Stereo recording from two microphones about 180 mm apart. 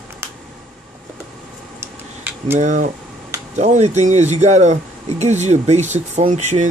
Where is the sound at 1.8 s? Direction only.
10° right (ahead or behind).